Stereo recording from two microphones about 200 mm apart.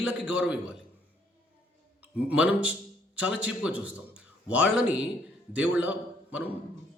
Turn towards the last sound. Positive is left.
turn(degrees=-10)  # may be behind; listen again after turning